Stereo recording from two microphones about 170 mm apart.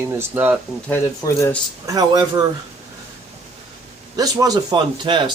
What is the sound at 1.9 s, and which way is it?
Speech, 20° right (ahead or behind).